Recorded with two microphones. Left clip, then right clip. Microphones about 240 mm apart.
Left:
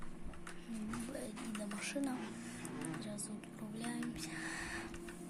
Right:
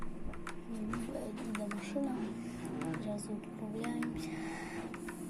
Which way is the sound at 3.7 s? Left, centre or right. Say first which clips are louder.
Right 5 dB; left.